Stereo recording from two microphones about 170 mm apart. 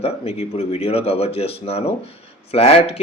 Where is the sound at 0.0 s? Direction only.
35° left (ahead or behind).